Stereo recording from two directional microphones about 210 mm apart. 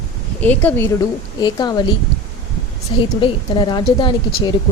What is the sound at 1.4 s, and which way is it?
Speech, 20° left (ahead or behind).